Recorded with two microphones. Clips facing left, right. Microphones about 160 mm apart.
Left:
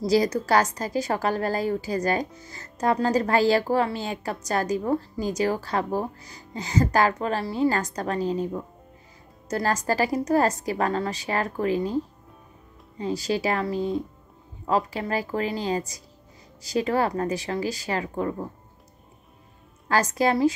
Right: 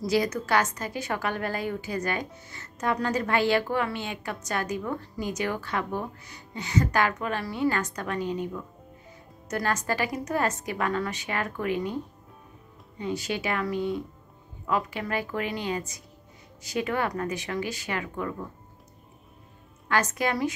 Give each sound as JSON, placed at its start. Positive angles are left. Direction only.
{"t": 0.0, "sound": "speech", "side_deg": 35}
{"t": 13.0, "sound": "speech", "side_deg": 35}
{"t": 19.9, "sound": "speech", "side_deg": 35}